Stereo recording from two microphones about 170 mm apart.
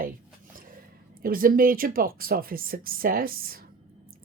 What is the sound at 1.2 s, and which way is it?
A woman's voice, 55° right (ahead or behind).